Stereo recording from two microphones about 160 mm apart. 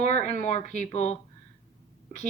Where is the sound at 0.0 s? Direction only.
45° left (ahead or behind).